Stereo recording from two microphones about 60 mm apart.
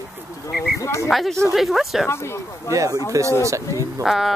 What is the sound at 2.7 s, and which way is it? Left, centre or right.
Speech, right.